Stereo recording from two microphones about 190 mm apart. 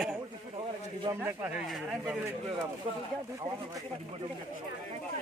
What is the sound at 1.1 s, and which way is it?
Speech, 20° right (ahead or behind).